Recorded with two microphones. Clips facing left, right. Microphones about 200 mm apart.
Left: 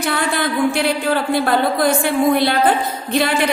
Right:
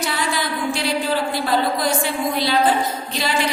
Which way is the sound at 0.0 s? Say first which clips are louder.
Left 4 dB; 55° left (ahead or behind).